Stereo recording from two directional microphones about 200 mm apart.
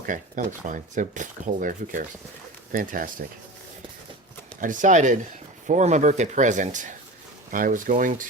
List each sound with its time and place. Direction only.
0.1 s speech: 40° right (ahead or behind)
4.6 s speech: 40° right (ahead or behind)